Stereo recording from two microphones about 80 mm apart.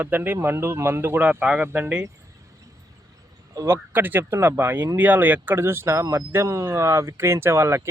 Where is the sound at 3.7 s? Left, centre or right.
Right.